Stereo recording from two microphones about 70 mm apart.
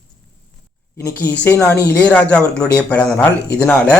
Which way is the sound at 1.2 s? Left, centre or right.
Left.